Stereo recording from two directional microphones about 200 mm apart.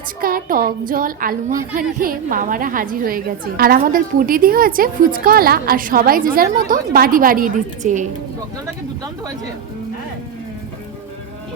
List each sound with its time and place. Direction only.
0.2 s a woman's voice: 45° right (ahead or behind)